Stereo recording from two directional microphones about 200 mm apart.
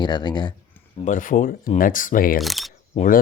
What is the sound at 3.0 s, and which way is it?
Speech, 40° left (ahead or behind).